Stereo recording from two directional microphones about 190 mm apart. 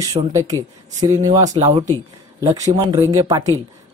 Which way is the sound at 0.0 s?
15° right (ahead or behind).